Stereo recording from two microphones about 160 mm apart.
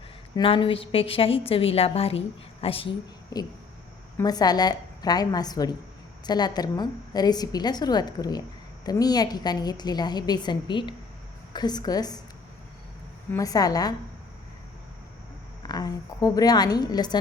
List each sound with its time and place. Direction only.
0.3 s a woman's voice: 35° left (ahead or behind)
3.3 s a woman's voice: 25° left (ahead or behind)
13.3 s a woman's voice: 20° left (ahead or behind)
15.6 s a woman's voice: 25° left (ahead or behind)